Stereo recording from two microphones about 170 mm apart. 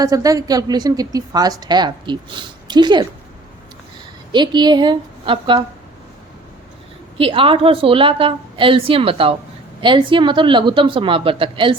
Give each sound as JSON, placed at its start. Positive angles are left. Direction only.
{"t": 0.0, "sound": "a woman's voice", "side_deg": -20}
{"t": 4.3, "sound": "a woman's voice", "side_deg": -25}
{"t": 7.2, "sound": "a woman's voice", "side_deg": -30}